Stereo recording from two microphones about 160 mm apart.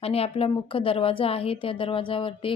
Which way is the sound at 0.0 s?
35° left (ahead or behind).